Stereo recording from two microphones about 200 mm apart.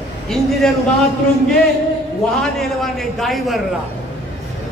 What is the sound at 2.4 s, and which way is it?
A man's voice, centre (ahead or behind).